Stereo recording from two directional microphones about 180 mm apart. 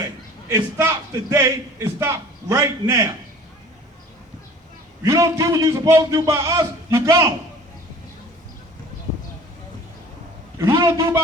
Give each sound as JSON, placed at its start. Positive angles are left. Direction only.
{"t": 0.5, "sound": "a man's voice", "side_deg": -20}
{"t": 5.0, "sound": "a man's voice", "side_deg": -20}
{"t": 10.6, "sound": "a man's voice", "side_deg": -20}